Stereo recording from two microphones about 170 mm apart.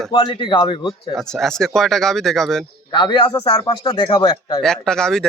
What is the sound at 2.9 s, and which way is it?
A man's voice, 30° left (ahead or behind).